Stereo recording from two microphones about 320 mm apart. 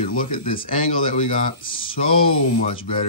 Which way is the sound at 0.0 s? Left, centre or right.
Left.